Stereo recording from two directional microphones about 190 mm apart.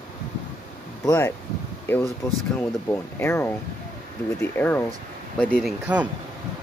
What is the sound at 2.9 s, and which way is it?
Speech, 15° left (ahead or behind).